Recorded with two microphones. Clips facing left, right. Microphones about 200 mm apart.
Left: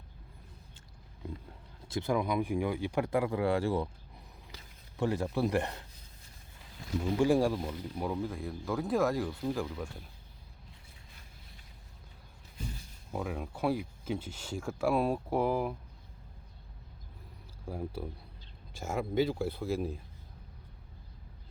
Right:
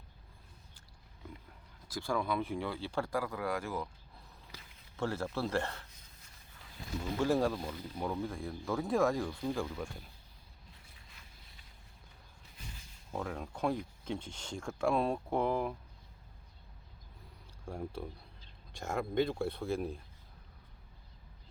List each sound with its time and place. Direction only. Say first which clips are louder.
1.9 s speech: left 4 dB; 20° left (ahead or behind)
4.9 s speech: left 5 dB; 15° left (ahead or behind)
7.0 s speech: left 4 dB; 15° left (ahead or behind)
13.1 s speech: left 2 dB; 5° left (ahead or behind)
17.7 s speech: left 2 dB; 5° left (ahead or behind)